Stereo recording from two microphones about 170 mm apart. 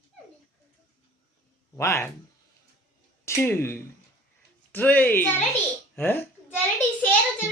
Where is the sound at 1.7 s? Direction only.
15° left (ahead or behind).